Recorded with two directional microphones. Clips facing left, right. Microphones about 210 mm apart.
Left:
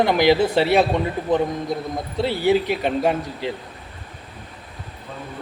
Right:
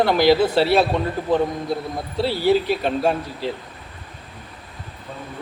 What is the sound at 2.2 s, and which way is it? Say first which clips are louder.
Speech: even; 20° left (ahead or behind).